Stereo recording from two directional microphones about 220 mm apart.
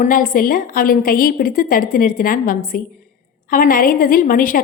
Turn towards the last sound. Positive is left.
turn(degrees=40)  # may be behind; listen again after turning